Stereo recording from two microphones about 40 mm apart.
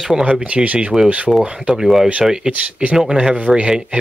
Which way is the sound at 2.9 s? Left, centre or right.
Centre.